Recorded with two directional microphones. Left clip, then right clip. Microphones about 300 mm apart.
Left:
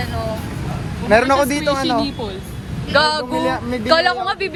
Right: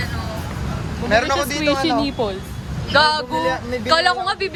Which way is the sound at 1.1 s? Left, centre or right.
Centre.